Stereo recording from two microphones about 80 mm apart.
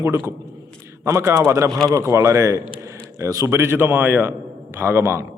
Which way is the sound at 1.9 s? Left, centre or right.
Right.